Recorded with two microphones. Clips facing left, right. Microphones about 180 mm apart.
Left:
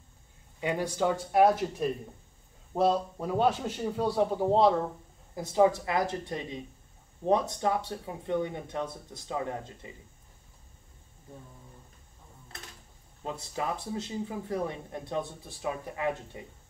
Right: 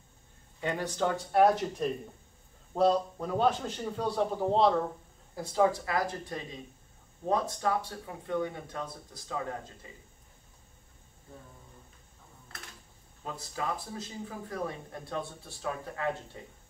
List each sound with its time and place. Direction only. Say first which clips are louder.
0.6 s a man's voice: left 2 dB; 10° left (ahead or behind)
13.2 s speech: left 2 dB; 20° left (ahead or behind)